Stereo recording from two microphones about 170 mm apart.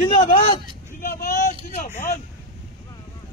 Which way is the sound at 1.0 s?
55° left (ahead or behind).